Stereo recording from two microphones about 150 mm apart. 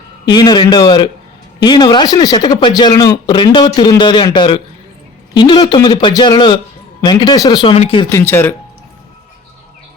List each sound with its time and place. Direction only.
0.3 s a man's voice: 30° left (ahead or behind)
8.1 s speech: 15° left (ahead or behind)